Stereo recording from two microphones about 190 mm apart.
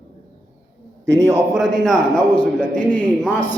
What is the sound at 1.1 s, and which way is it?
Speech, 15° right (ahead or behind).